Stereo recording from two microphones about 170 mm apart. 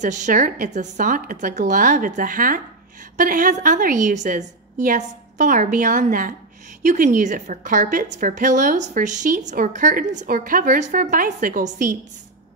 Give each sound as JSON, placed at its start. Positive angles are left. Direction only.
{"t": 0.0, "sound": "a woman's voice", "side_deg": -45}